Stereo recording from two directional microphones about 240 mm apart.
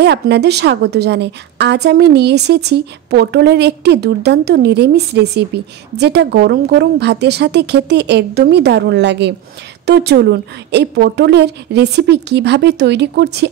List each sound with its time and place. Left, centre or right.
0.0 s a woman's voice: right